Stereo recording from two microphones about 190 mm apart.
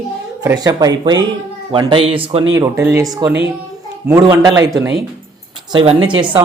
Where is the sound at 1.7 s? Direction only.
25° right (ahead or behind).